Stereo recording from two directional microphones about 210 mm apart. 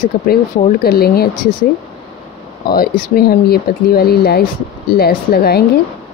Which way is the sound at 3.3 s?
45° left (ahead or behind).